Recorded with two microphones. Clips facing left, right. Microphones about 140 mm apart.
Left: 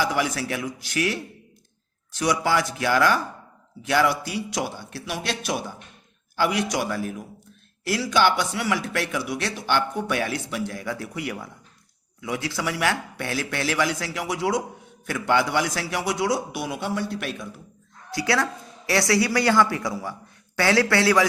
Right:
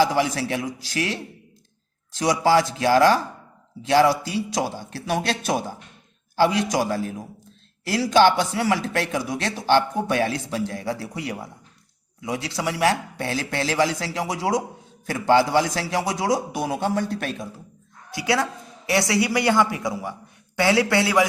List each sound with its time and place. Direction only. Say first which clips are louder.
0.0 s speech: right 4 dB; 30° right (ahead or behind)
2.1 s a man's voice: right 4 dB; 35° right (ahead or behind)
6.3 s a man's voice: right 4 dB; 30° right (ahead or behind)
14.3 s a man's voice: left 1 dB; 40° right (ahead or behind)
16.2 s a man's voice: right 2 dB; 40° right (ahead or behind)
18.1 s speech: right 1 dB; 20° right (ahead or behind)